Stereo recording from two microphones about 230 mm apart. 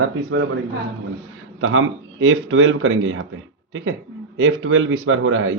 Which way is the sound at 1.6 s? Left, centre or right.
Right.